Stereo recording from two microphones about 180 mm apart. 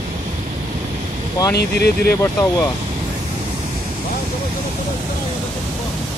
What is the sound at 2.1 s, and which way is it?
Speech, 15° left (ahead or behind).